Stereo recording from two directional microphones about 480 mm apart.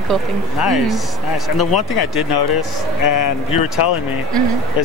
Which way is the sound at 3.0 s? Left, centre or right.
Left.